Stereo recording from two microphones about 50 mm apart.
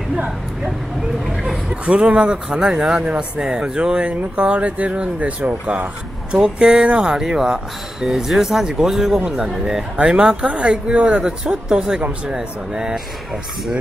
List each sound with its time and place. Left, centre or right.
1.7 s speech: right
6.3 s speech: centre